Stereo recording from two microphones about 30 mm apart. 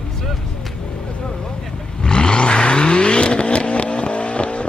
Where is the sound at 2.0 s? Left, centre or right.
Left.